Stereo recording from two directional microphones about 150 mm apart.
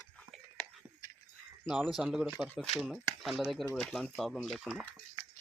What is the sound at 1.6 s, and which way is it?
Speech, 5° right (ahead or behind).